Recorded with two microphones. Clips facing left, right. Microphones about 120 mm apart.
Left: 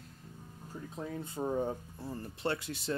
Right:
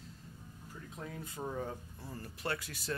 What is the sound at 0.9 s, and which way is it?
Music, 30° left (ahead or behind).